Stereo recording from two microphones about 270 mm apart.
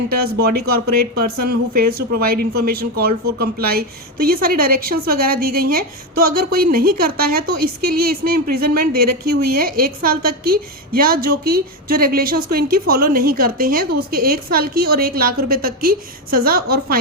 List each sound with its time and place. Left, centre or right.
0.1 s a woman's voice: right